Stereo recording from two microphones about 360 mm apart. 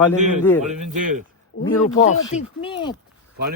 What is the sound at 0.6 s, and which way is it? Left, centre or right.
Speech, centre.